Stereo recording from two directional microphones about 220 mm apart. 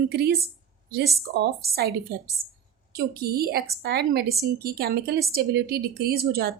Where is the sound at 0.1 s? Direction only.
45° right (ahead or behind).